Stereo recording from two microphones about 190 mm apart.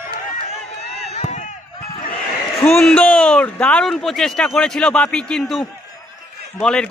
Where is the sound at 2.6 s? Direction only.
5° left (ahead or behind).